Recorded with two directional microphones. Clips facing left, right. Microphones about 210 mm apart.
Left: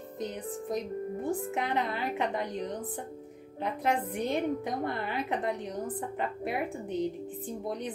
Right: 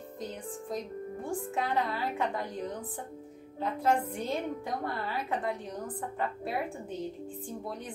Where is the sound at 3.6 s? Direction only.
20° left (ahead or behind).